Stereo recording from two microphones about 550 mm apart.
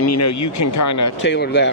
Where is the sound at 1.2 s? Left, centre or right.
Centre.